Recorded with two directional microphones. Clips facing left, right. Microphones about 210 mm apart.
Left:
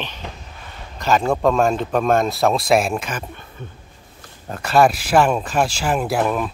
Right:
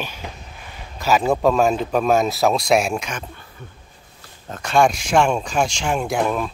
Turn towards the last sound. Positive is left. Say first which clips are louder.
# left 1 dB
turn(degrees=5)  # may be behind; listen again after turning